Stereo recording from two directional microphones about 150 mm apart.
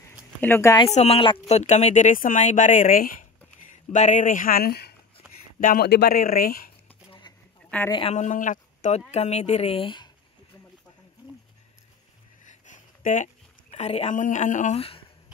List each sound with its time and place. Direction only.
0.4 s speech: 15° left (ahead or behind)
0.9 s speech: 40° left (ahead or behind)
1.5 s speech: 50° left (ahead or behind); by 3.3 s 70° left (ahead or behind)
3.9 s speech: 50° left (ahead or behind); by 4.9 s 90° left
5.6 s speech: 75° left (ahead or behind)
7.1 s a sound: 30° left (ahead or behind)
8.1 s speech: 55° left (ahead or behind)
9.1 s speech: 45° left (ahead or behind)
12.4 s a sound: 60° left (ahead or behind)
13.7 s speech: 45° left (ahead or behind)
14.2 s speech: 55° left (ahead or behind)
14.8 s speech: 40° left (ahead or behind)